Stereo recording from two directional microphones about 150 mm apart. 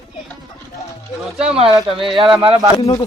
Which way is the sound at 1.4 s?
40° right (ahead or behind).